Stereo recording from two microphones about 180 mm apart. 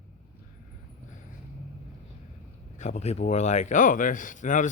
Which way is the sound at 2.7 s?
40° left (ahead or behind).